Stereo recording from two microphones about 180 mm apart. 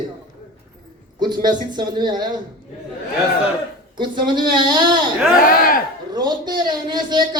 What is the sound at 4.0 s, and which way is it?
Speech, 25° right (ahead or behind).